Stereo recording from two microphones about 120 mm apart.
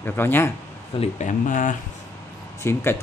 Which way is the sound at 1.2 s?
90° left.